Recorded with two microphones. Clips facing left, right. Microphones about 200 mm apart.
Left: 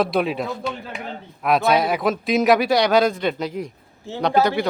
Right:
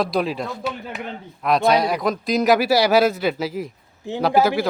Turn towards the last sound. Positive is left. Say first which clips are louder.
# right 1 dB
turn(degrees=-5)  # may be behind; listen again after turning